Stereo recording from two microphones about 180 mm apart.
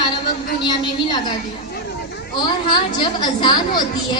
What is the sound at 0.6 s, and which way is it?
Speech, 25° left (ahead or behind).